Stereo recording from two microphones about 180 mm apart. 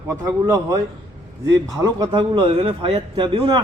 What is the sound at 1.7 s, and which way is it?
Speech, 20° right (ahead or behind).